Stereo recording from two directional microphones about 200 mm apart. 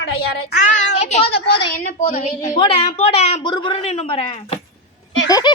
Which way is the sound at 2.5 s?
25° left (ahead or behind).